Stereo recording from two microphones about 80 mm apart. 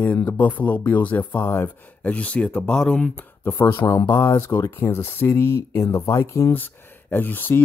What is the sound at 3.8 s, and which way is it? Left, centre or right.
Speech, left.